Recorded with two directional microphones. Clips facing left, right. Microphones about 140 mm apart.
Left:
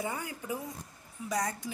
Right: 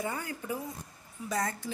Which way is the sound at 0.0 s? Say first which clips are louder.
Right 1 dB; 15° left (ahead or behind).